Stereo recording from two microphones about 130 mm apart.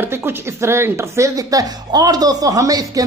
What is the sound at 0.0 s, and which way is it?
Speech, 20° right (ahead or behind).